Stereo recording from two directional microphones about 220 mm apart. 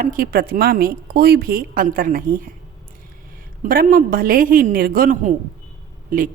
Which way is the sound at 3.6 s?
40° right (ahead or behind).